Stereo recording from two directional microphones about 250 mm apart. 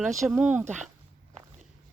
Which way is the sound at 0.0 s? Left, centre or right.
Centre.